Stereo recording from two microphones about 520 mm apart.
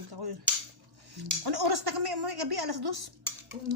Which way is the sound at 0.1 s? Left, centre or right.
Right.